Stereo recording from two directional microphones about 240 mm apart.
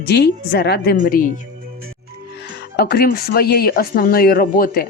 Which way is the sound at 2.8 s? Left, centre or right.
Left.